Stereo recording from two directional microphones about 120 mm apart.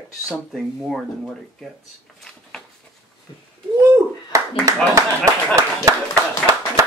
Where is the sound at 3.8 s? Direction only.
25° right (ahead or behind).